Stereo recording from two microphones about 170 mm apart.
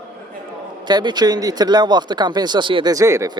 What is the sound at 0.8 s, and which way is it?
Speech, 25° right (ahead or behind).